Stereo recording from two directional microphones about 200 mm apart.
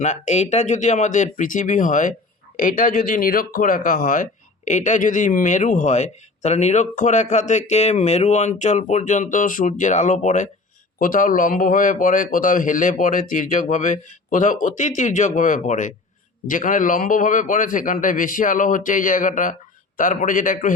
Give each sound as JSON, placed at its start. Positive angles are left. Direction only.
{"t": 0.0, "sound": "speech", "side_deg": 35}